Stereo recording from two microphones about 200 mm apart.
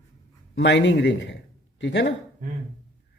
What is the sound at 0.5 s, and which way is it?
A man's voice, 60° left (ahead or behind).